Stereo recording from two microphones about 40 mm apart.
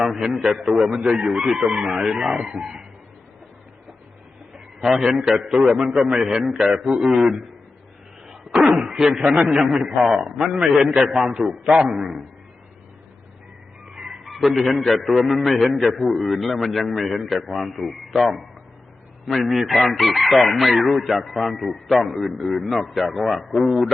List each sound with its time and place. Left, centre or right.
0.4 s chicken: centre
0.9 s speech: centre
4.8 s chicken: centre
5.4 s speech: centre
7.1 s chicken: centre
8.3 s a sound: centre
8.8 s speech: centre
9.6 s chicken: centre
10.2 s speech: centre
11.4 s chicken: centre
13.9 s fowl: centre
14.3 s speech: centre
14.8 s chicken: centre